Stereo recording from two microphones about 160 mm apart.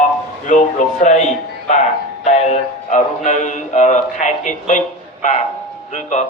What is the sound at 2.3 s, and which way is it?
Music, 50° left (ahead or behind).